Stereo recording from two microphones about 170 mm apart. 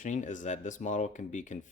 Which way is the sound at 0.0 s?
45° left (ahead or behind).